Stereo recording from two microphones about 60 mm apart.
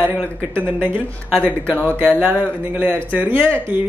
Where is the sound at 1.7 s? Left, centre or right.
Left.